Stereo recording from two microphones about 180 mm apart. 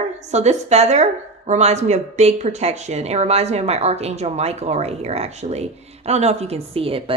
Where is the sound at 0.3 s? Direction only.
40° right (ahead or behind).